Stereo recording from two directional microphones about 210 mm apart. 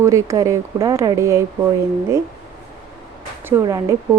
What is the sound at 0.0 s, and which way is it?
Speech, 15° right (ahead or behind).